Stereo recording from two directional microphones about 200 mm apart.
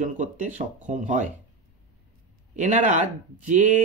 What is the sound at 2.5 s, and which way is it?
Speech, 35° right (ahead or behind).